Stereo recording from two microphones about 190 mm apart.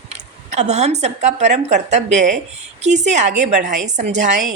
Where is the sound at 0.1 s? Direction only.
35° right (ahead or behind).